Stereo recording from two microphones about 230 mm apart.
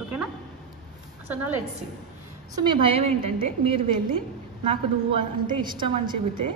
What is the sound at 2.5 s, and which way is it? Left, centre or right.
A woman's voice, right.